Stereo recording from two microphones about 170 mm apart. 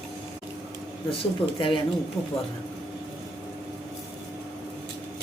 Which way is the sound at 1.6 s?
30° left (ahead or behind).